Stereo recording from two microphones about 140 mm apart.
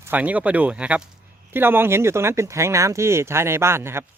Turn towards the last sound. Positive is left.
turn(degrees=-20)  # may be behind; listen again after turning